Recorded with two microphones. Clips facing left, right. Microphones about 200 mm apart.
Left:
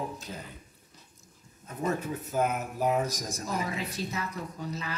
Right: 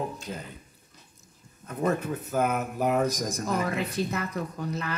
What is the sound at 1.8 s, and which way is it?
Speech, 55° right (ahead or behind).